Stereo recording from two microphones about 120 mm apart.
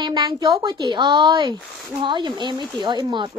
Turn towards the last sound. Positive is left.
turn(degrees=-40)  # may be behind; listen again after turning